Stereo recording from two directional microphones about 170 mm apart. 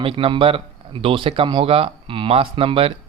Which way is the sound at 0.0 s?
30° right (ahead or behind).